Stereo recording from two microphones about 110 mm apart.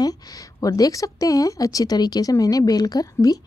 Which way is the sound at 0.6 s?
35° left (ahead or behind).